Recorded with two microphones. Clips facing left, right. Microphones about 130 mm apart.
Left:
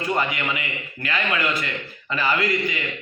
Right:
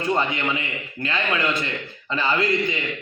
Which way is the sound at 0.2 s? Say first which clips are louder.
Right 1 dB; 25° right (ahead or behind).